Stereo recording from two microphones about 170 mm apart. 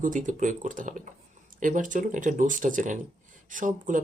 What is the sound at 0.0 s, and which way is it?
Speech, 50° right (ahead or behind).